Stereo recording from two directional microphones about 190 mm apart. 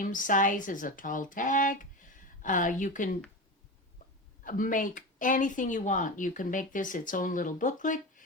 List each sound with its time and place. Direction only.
0.0 s speech: 45° left (ahead or behind)
4.4 s speech: 45° left (ahead or behind)